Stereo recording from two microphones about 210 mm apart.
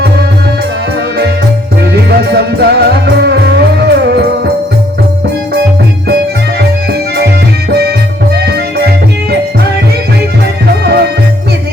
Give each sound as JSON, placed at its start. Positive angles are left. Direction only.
{"t": 1.8, "sound": "music", "side_deg": -50}
{"t": 7.7, "sound": "music", "side_deg": -50}
{"t": 10.8, "sound": "music", "side_deg": -50}